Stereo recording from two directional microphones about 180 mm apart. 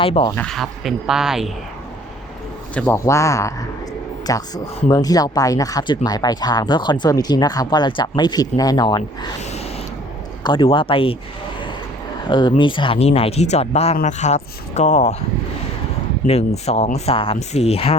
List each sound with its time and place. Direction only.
0.0 s speech: 30° left (ahead or behind)
0.3 s speech: 5° left (ahead or behind)
2.7 s speech: 10° left (ahead or behind)
10.4 s speech: 25° left (ahead or behind)
12.3 s speech: 25° left (ahead or behind)
16.2 s speech: 35° left (ahead or behind)